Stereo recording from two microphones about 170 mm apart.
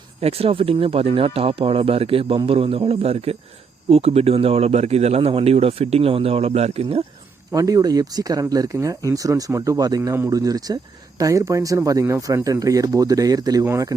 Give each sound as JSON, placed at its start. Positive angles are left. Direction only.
{"t": 0.2, "sound": "speech", "side_deg": -35}
{"t": 7.5, "sound": "speech", "side_deg": -20}